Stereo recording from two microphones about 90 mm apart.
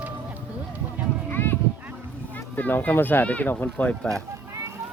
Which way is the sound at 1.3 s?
25° left (ahead or behind).